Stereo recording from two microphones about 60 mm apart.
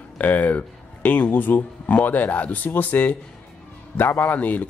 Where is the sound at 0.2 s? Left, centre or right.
Left.